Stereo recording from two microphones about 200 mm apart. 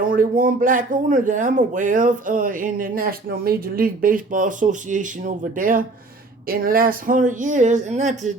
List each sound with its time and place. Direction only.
0.0 s speech: 45° right (ahead or behind)